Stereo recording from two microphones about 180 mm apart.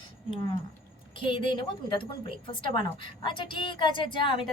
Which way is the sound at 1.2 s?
30° left (ahead or behind).